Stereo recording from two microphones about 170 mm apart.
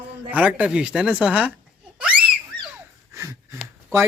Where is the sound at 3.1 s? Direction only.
15° right (ahead or behind).